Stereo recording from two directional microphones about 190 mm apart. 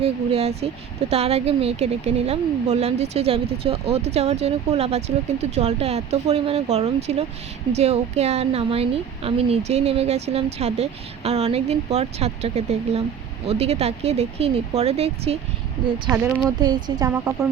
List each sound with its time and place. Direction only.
0.0 s a woman's voice: 30° right (ahead or behind)
16.1 s speech: 5° right (ahead or behind)
16.6 s speech: 20° right (ahead or behind)